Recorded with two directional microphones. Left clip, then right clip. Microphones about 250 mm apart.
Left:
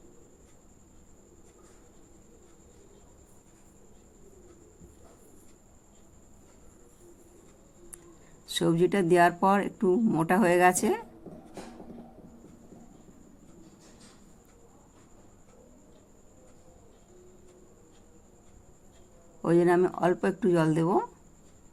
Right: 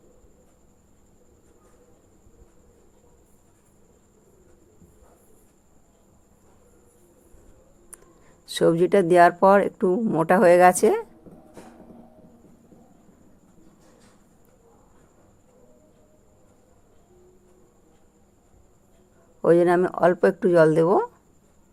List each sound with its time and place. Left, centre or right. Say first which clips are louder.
8.4 s speech: right 6 dB; right
19.4 s speech: right 6 dB; right